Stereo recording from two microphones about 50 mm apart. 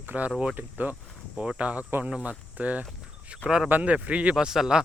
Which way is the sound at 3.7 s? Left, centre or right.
Right.